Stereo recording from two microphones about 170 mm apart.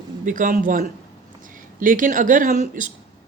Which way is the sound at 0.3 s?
50° right (ahead or behind).